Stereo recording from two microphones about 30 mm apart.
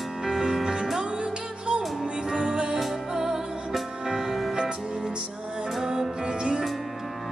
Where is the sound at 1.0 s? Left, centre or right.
Right; by 4.5 s centre.